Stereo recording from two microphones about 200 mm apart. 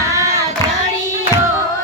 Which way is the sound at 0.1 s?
15° right (ahead or behind).